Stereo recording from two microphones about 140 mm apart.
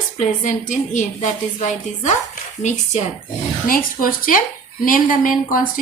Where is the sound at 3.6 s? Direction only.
90° left.